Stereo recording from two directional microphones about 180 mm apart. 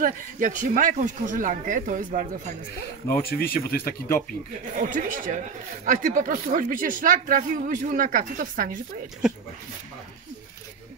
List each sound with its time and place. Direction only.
0.0 s speech: 45° right (ahead or behind)
3.2 s speech: 55° left (ahead or behind)
4.7 s speech: 45° right (ahead or behind)
9.2 s speech: 5° right (ahead or behind)